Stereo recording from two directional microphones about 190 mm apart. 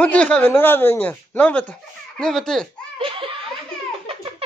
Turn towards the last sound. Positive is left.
turn(degrees=-30)  # may be behind; listen again after turning